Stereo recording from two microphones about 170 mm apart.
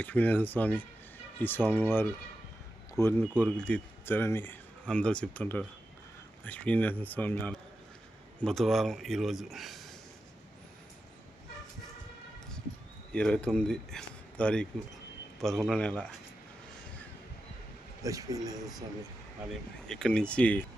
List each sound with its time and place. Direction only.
0.0 s speech: 10° left (ahead or behind)
2.9 s a man's voice: 15° left (ahead or behind)
13.1 s a man's voice: 5° left (ahead or behind)
18.0 s speech: 20° right (ahead or behind)
19.9 s speech: 5° left (ahead or behind)